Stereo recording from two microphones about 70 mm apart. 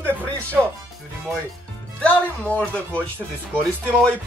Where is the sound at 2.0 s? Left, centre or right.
Centre.